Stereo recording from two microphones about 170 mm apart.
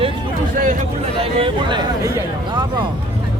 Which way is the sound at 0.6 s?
50° right (ahead or behind).